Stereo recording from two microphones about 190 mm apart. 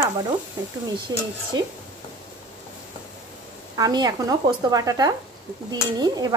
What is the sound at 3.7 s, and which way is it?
Speech, 20° right (ahead or behind).